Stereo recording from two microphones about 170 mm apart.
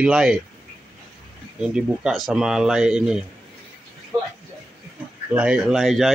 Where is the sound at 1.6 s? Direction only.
5° right (ahead or behind).